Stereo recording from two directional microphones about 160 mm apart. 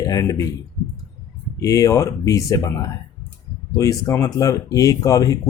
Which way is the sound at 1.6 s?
20° left (ahead or behind).